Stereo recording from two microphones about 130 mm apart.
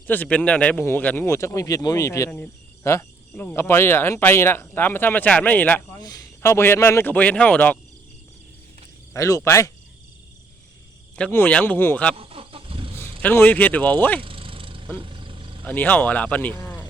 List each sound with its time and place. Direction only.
0.1 s speech: 10° left (ahead or behind)
6.0 s speech: 30° left (ahead or behind); by 7.8 s 10° left (ahead or behind)
9.1 s speech: 25° left (ahead or behind)
11.2 s speech: 15° left (ahead or behind)
12.1 s vehicle: 45° right (ahead or behind)
13.2 s speech: 15° left (ahead or behind)
14.2 s vehicle: 45° right (ahead or behind)
15.6 s speech: 15° left (ahead or behind)
16.6 s cricket: 15° left (ahead or behind)